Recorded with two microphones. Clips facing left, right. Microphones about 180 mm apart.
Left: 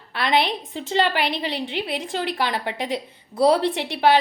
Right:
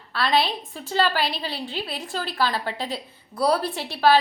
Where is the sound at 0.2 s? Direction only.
20° left (ahead or behind).